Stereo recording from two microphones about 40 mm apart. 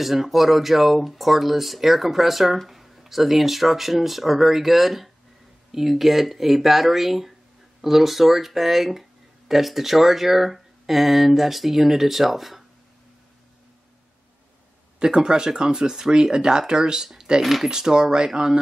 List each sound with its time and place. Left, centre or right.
0.0 s speech: centre
15.0 s speech: centre
17.4 s speech: centre
17.6 s speech: centre